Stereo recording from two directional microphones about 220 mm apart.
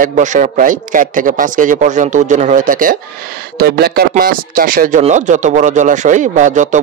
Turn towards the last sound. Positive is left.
turn(degrees=-35)  # may be behind; listen again after turning